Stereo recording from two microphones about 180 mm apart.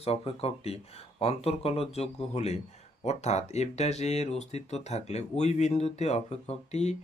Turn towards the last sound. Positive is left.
turn(degrees=40)  # may be behind; listen again after turning